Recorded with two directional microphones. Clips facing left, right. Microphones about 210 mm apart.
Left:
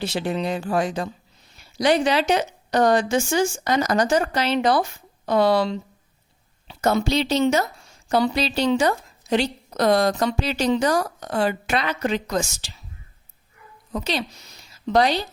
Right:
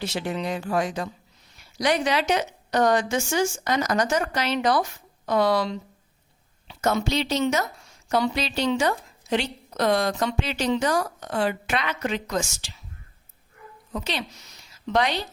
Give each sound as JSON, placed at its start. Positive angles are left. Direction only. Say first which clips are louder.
{"t": 0.0, "sound": "a woman's voice", "louder": "left 3 dB", "side_deg": 30}
{"t": 13.9, "sound": "a woman's voice", "louder": "left 4 dB", "side_deg": 35}